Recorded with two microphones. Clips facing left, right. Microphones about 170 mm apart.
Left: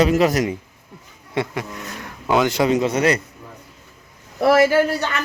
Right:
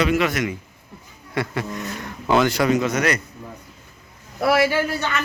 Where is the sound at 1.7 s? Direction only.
5° left (ahead or behind).